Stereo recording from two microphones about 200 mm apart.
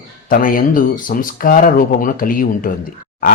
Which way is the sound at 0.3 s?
45° left (ahead or behind).